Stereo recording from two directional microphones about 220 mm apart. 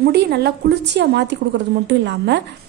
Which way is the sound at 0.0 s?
45° right (ahead or behind).